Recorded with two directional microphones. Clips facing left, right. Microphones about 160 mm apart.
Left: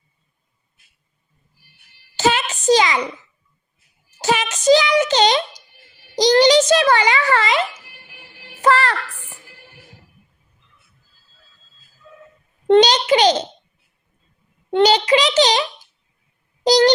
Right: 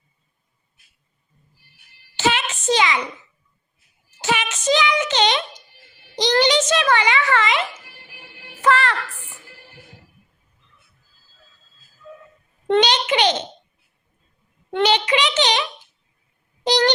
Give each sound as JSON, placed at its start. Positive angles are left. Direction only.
{"t": 2.1, "sound": "a sound", "side_deg": 40}
{"t": 4.2, "sound": "a child's voice", "side_deg": 40}
{"t": 12.6, "sound": "a child's voice", "side_deg": 35}
{"t": 14.7, "sound": "a child's voice", "side_deg": 35}
{"t": 16.6, "sound": "a child's voice", "side_deg": 35}